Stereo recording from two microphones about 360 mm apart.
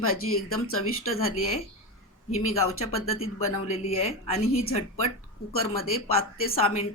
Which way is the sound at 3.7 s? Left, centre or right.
Centre.